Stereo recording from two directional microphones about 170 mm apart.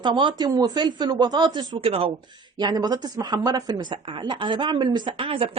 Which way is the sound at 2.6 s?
25° right (ahead or behind).